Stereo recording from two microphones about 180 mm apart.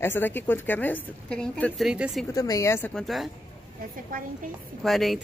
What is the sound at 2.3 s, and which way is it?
Speech, 20° left (ahead or behind).